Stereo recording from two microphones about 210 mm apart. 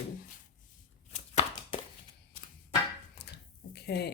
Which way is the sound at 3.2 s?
50° left (ahead or behind).